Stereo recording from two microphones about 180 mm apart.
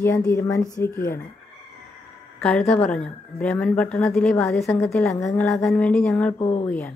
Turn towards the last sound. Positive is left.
turn(degrees=20)  # may be behind; listen again after turning